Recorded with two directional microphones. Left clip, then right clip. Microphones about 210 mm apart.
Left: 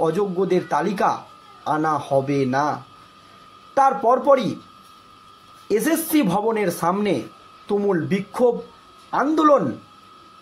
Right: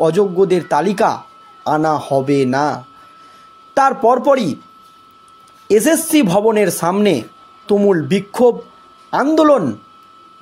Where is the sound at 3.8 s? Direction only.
40° right (ahead or behind).